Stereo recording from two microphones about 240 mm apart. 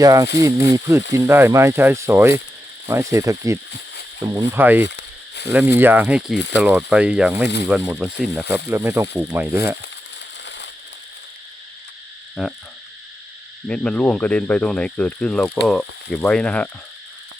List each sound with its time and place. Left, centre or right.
0.0 s speech: centre
4.9 s frying: left
5.5 s speech: centre
6.3 s speech: left
6.6 s speech: centre
12.4 s speech: centre
13.7 s speech: centre